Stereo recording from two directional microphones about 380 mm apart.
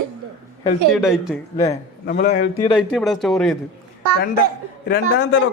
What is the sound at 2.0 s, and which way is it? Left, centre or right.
Speech, left.